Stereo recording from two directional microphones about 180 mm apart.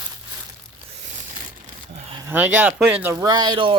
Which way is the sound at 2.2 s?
10° right (ahead or behind).